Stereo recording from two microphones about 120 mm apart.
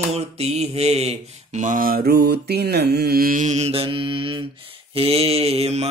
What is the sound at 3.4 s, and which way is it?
Mantra, 70° right (ahead or behind).